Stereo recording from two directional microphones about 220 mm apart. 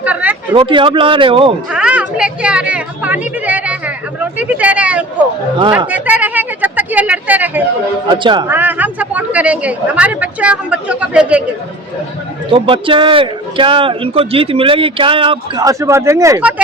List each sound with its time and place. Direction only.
0.0 s a sound: 5° right (ahead or behind)
0.5 s a man's voice: 25° right (ahead or behind)
1.7 s a sound: 5° right (ahead or behind)
5.9 s speech: 5° right (ahead or behind)
8.1 s a man's voice: 20° right (ahead or behind)
8.4 s speech: 10° right (ahead or behind)
12.5 s a man's voice: 25° right (ahead or behind); by 16.6 s 5° right (ahead or behind)